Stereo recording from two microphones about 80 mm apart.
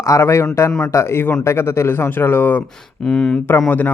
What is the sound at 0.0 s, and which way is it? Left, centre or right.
A man's voice, left.